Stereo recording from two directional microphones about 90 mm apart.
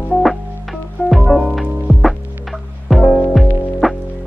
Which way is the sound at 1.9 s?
20° left (ahead or behind).